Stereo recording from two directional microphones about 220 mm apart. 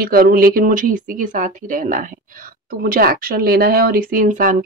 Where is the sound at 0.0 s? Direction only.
40° right (ahead or behind).